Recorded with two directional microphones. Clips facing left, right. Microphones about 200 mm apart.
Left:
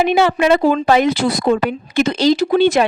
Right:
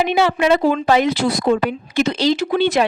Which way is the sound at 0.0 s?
50° left (ahead or behind).